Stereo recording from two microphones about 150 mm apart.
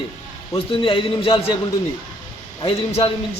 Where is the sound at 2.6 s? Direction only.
40° left (ahead or behind).